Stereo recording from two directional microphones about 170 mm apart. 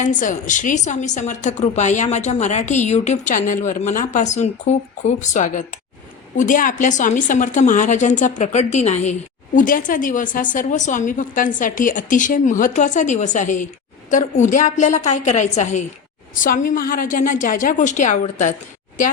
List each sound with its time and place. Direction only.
0.0 s a woman's voice: 50° left (ahead or behind)